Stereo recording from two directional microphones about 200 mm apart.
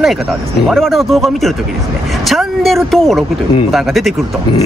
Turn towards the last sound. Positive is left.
turn(degrees=0)  # may be behind; listen again after turning